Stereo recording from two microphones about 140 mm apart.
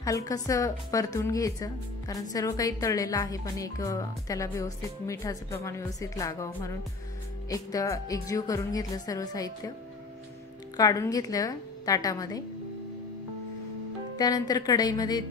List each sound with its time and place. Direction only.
0.0 s speech: 25° left (ahead or behind)
10.8 s speech: 25° left (ahead or behind)
14.1 s speech: 30° left (ahead or behind)